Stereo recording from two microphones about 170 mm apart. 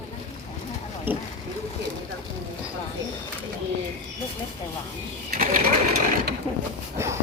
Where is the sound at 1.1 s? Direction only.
10° right (ahead or behind).